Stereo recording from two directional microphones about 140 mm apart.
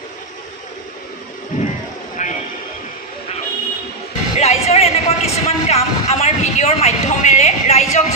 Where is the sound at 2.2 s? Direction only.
60° left (ahead or behind).